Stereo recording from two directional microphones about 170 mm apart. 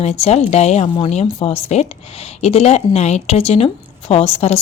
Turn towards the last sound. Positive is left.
turn(degrees=40)  # may be behind; listen again after turning